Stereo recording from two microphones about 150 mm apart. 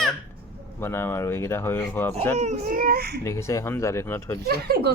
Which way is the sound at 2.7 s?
85° right.